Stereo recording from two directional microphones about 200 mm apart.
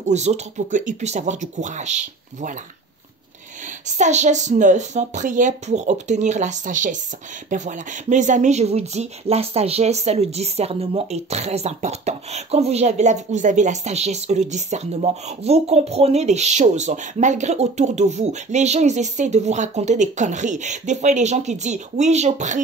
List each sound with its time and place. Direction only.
0.1 s speech: 35° right (ahead or behind)
3.8 s speech: 35° right (ahead or behind)